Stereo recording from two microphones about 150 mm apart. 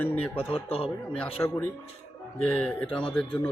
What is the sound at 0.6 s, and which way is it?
Speech, 40° left (ahead or behind).